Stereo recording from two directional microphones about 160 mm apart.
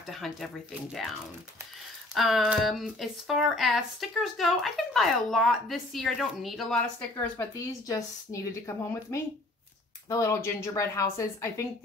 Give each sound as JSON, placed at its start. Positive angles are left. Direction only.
{"t": 0.1, "sound": "speech", "side_deg": 0}
{"t": 2.1, "sound": "speech", "side_deg": 0}